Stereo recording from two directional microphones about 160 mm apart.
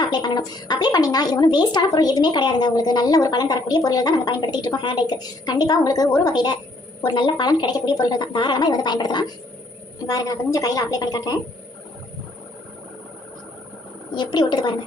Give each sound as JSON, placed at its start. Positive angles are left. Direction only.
{"t": 0.1, "sound": "speech", "side_deg": 25}
{"t": 14.2, "sound": "speech", "side_deg": 25}